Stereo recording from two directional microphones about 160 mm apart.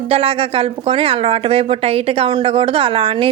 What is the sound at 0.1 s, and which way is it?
A woman's voice, 35° right (ahead or behind).